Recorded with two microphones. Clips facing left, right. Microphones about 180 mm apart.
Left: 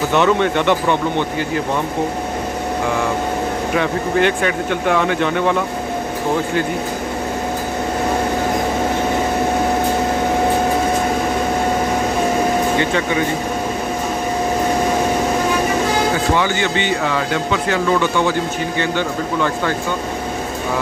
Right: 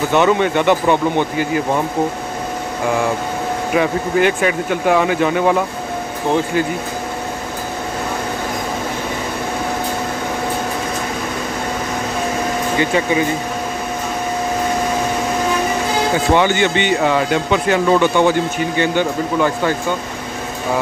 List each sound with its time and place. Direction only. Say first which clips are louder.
0.1 s speech: right 1 dB; 5° right (ahead or behind)
3.7 s speech: right 3 dB; 5° right (ahead or behind)
16.3 s speech: right 3 dB; 20° right (ahead or behind)